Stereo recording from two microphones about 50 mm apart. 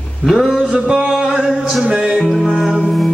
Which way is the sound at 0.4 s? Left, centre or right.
Centre.